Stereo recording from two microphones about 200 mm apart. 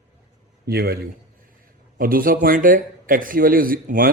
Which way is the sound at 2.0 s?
45° right (ahead or behind).